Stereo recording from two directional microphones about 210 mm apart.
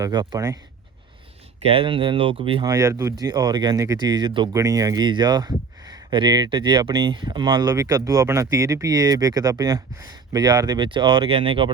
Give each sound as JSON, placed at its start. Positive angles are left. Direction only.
{"t": 0.0, "sound": "speech", "side_deg": -20}
{"t": 1.6, "sound": "speech", "side_deg": -25}